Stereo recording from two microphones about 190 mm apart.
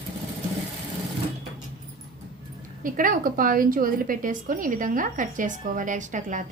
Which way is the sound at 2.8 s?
45° right (ahead or behind).